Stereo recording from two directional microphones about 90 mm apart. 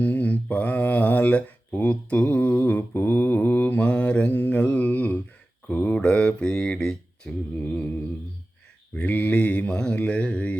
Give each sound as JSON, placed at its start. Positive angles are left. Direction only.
{"t": 0.0, "sound": "speech", "side_deg": 20}
{"t": 5.6, "sound": "mantra", "side_deg": 20}
{"t": 9.0, "sound": "mantra", "side_deg": 20}